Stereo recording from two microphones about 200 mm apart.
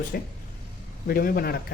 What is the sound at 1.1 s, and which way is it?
Speech, 50° left (ahead or behind).